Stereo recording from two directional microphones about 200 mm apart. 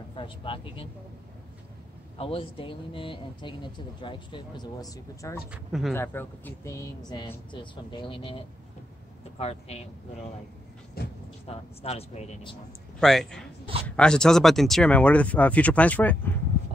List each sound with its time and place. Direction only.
0.1 s speech: 25° left (ahead or behind)
2.1 s speech: 25° left (ahead or behind)
5.5 s speech: centre (ahead or behind)
5.9 s speech: 10° left (ahead or behind)
9.4 s speech: 30° left (ahead or behind)
11.4 s speech: 30° left (ahead or behind)
13.0 s speech: centre (ahead or behind)